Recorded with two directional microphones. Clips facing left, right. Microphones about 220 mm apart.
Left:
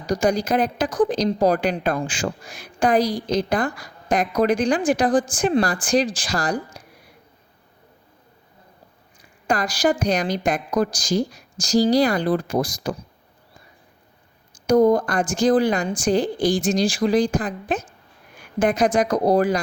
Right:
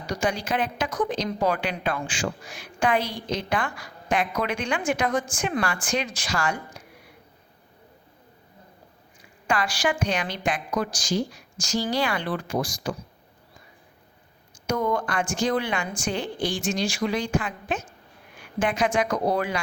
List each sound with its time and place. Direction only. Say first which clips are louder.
0.0 s a woman's voice: left 7 dB; 40° left (ahead or behind)
9.5 s a woman's voice: left 5 dB; 40° left (ahead or behind)
14.7 s a woman's voice: left 9 dB; 35° left (ahead or behind)